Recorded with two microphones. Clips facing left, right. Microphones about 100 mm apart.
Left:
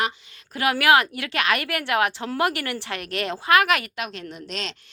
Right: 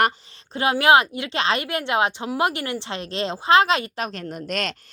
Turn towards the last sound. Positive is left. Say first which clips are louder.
# right 5 dB
turn(degrees=-50)  # may be behind; listen again after turning